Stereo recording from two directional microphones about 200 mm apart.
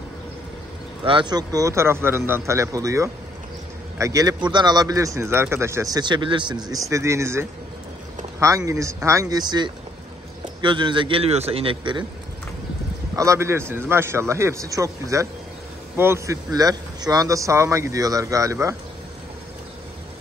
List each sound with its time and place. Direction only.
1.0 s a man's voice: 25° right (ahead or behind)
13.1 s a man's voice: 15° right (ahead or behind)